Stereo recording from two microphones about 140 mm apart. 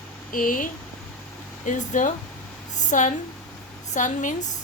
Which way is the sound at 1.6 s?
65° left (ahead or behind).